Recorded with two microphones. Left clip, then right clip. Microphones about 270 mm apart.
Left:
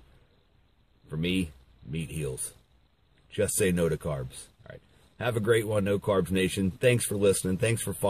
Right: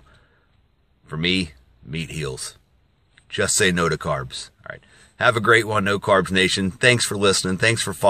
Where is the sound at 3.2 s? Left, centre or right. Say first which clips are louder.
Right 8 dB; centre.